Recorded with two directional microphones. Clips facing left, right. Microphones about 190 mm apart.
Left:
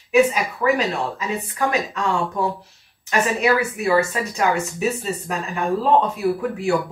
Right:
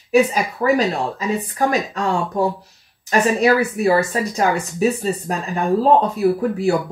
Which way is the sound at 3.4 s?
35° right (ahead or behind).